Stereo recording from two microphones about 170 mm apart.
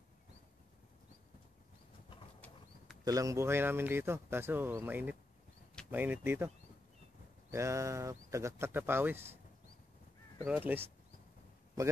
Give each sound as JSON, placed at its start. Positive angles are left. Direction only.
{"t": 2.4, "sound": "a sound", "side_deg": 10}
{"t": 3.1, "sound": "speech", "side_deg": -20}
{"t": 7.5, "sound": "speech", "side_deg": -15}
{"t": 10.4, "sound": "speech", "side_deg": -10}